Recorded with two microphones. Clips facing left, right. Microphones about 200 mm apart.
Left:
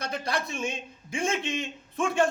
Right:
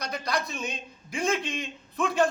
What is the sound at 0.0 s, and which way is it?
A man's voice, 25° left (ahead or behind).